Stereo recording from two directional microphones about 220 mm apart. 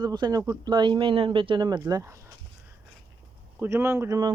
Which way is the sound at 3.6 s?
10° right (ahead or behind).